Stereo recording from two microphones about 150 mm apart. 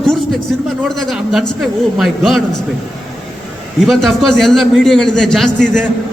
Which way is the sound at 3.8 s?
Centre (ahead or behind).